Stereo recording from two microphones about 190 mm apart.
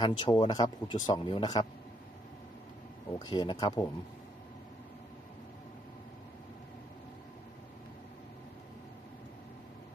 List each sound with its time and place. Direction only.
0.0 s speech: 25° left (ahead or behind)
3.2 s speech: 25° left (ahead or behind)